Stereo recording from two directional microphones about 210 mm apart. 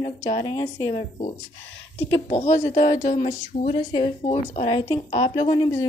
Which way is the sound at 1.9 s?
30° left (ahead or behind).